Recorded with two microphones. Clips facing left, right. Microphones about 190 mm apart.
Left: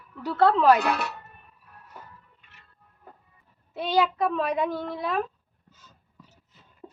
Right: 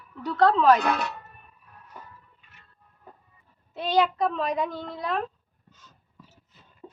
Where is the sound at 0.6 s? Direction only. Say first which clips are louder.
Even; 10° left (ahead or behind).